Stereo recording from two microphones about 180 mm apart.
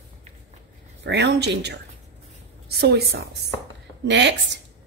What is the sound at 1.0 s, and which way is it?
A woman's voice, 70° right (ahead or behind).